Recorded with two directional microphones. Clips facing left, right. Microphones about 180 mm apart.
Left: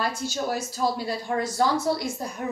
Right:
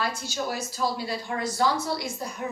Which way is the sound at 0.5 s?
50° left (ahead or behind).